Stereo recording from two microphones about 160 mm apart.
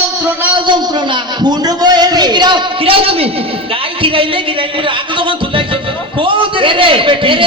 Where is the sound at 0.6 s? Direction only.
25° right (ahead or behind).